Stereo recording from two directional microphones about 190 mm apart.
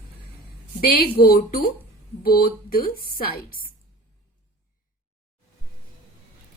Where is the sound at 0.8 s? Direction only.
50° left (ahead or behind).